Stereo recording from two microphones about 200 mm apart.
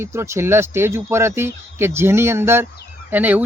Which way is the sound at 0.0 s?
15° right (ahead or behind).